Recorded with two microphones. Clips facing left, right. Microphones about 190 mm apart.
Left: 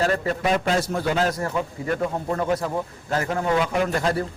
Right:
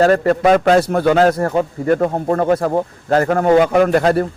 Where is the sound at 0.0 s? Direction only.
65° right (ahead or behind).